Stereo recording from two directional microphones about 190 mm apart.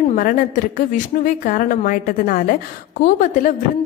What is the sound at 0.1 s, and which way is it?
A woman's voice, 45° left (ahead or behind).